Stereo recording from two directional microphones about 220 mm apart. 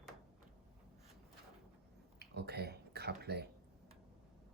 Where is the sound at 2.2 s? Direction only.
50° right (ahead or behind).